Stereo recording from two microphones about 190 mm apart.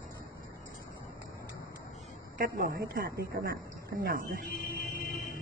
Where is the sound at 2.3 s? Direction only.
50° right (ahead or behind).